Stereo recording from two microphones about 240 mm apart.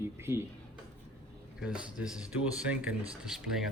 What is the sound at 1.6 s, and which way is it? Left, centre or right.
Speech, centre.